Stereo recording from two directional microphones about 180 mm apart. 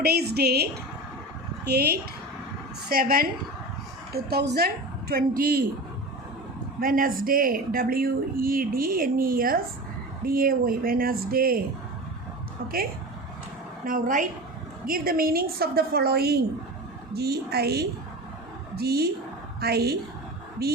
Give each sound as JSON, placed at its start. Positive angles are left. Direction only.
{"t": 0.0, "sound": "a woman's voice", "side_deg": -60}
{"t": 6.7, "sound": "a woman's voice", "side_deg": -50}
{"t": 12.6, "sound": "a woman's voice", "side_deg": -55}